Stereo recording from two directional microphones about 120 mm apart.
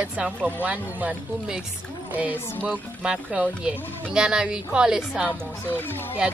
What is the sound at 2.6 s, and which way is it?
A woman's voice, 10° right (ahead or behind).